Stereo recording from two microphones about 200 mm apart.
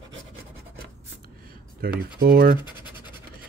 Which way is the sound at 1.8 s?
50° right (ahead or behind).